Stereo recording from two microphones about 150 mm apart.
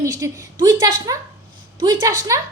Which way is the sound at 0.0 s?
25° right (ahead or behind).